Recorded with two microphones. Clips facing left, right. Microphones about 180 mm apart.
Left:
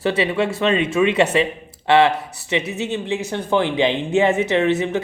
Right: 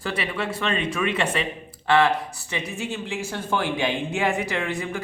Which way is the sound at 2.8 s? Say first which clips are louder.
Left 6 dB; 20° left (ahead or behind).